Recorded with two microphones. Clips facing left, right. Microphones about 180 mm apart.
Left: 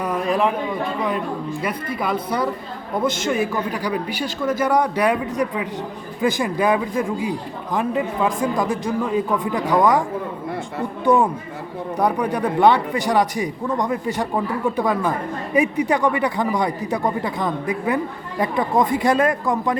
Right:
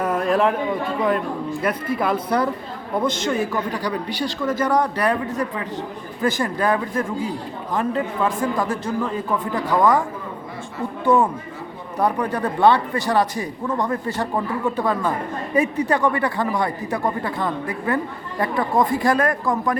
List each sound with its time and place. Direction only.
0.0 s a sound: centre (ahead or behind)
1.6 s speech: centre (ahead or behind)
11.0 s speech: 15° left (ahead or behind)